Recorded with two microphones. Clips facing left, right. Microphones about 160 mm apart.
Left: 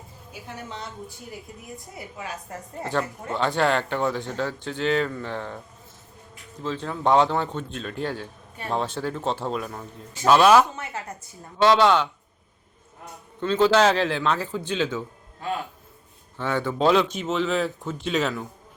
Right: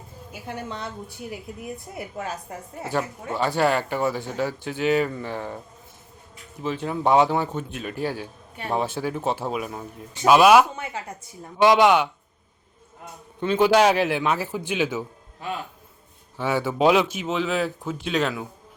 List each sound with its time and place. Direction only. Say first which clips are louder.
0.4 s a woman's voice: right 4 dB; 60° right (ahead or behind)
2.5 s speech: even; 10° right (ahead or behind)
6.6 s speech: right 2 dB; 15° right (ahead or behind)
13.4 s speech: right 1 dB; 15° right (ahead or behind)
16.4 s speech: right 2 dB; 10° right (ahead or behind)